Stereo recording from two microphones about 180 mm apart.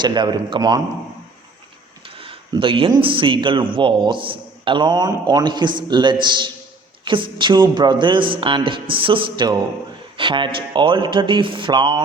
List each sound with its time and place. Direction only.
0.0 s a man's voice: 25° right (ahead or behind)
2.0 s a man's voice: 30° right (ahead or behind)